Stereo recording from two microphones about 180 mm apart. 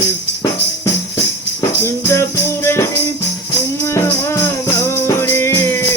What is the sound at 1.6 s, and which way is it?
Music, 15° left (ahead or behind).